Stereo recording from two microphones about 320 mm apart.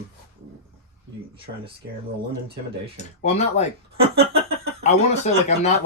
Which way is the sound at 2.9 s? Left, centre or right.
Left.